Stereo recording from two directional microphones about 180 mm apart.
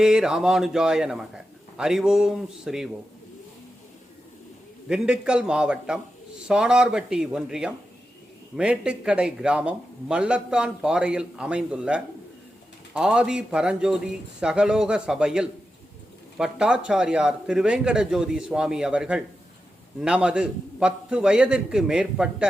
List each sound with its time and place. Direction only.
0.0 s a man's voice: 5° right (ahead or behind)
4.9 s a man's voice: 5° right (ahead or behind)